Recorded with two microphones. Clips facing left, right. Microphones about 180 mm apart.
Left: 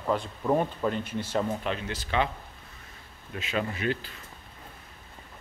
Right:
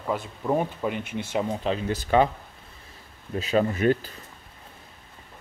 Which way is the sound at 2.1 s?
45° right (ahead or behind).